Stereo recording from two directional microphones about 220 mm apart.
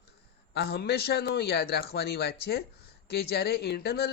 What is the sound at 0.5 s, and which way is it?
A woman's voice, 45° left (ahead or behind).